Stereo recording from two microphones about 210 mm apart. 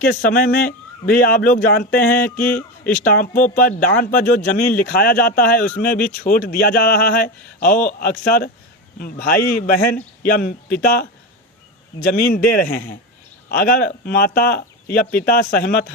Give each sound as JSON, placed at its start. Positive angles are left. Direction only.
{"t": 0.0, "sound": "speech", "side_deg": 45}
{"t": 2.2, "sound": "music", "side_deg": 10}
{"t": 2.9, "sound": "speech", "side_deg": 40}
{"t": 12.2, "sound": "speech", "side_deg": 45}